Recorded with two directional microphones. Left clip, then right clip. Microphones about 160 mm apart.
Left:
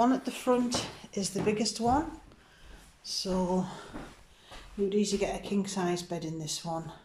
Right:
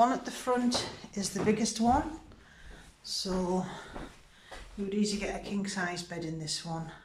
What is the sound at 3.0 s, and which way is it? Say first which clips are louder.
Speech: left 2 dB; 5° left (ahead or behind).